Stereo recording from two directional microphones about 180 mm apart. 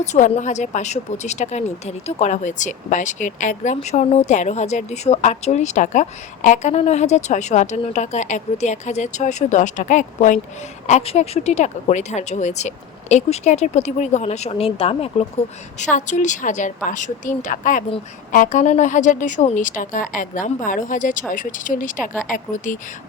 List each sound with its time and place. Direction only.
0.0 s a woman's voice: 40° left (ahead or behind)